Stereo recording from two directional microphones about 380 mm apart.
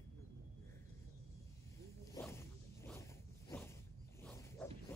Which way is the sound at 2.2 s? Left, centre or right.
Centre.